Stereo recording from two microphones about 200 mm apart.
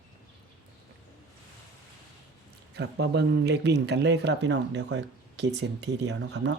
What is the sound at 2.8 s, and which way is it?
Speech, 60° right (ahead or behind).